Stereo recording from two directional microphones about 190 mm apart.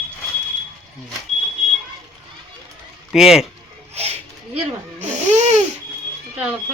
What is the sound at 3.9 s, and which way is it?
Speech, 35° right (ahead or behind).